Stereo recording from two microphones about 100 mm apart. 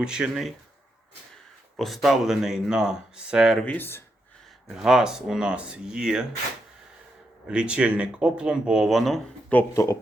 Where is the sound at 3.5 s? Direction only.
15° left (ahead or behind).